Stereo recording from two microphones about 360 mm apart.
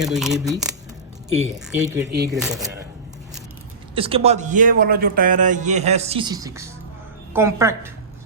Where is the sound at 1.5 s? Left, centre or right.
Centre.